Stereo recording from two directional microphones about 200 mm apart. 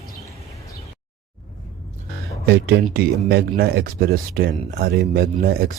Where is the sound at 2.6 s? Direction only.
50° right (ahead or behind).